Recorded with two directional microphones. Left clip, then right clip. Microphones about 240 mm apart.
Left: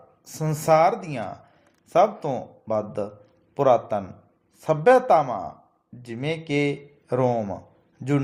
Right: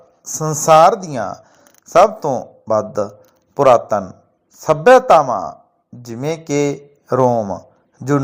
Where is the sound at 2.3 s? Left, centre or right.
Right.